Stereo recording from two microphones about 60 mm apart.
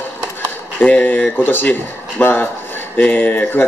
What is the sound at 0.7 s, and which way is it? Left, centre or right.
Speech, left.